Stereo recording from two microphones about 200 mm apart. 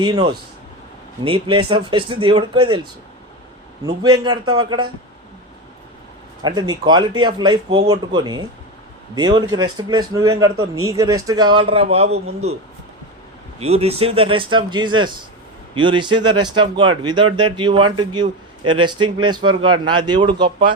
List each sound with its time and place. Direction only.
0.0 s a man's voice: 25° right (ahead or behind)
4.2 s a man's voice: 20° right (ahead or behind)
6.4 s a man's voice: 20° right (ahead or behind)
13.6 s a man's voice: 30° right (ahead or behind)